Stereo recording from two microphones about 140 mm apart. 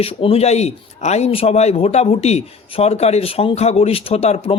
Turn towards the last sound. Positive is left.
turn(degrees=45)  # may be behind; listen again after turning